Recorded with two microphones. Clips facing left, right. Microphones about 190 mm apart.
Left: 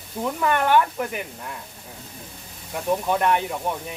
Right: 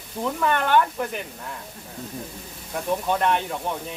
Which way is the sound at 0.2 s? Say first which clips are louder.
Left 1 dB; 5° left (ahead or behind).